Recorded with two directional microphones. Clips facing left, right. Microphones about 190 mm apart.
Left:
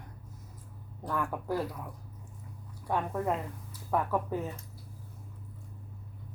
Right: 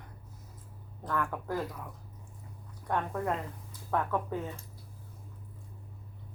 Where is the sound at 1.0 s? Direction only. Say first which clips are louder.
Left 1 dB; 10° left (ahead or behind).